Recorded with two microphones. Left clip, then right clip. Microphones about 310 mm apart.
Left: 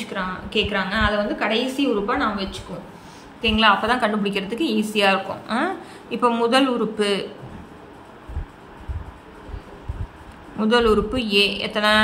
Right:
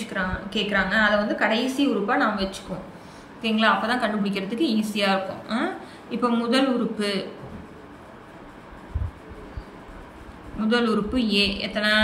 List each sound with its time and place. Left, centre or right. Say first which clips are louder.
0.1 s a woman's voice: left 3 dB; centre
10.6 s a woman's voice: left 6 dB; centre